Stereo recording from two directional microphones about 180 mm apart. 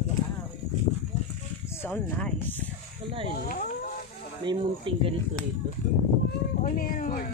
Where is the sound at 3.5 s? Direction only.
50° left (ahead or behind).